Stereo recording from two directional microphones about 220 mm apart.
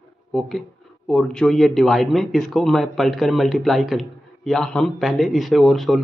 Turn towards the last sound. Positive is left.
turn(degrees=0)  # may be behind; listen again after turning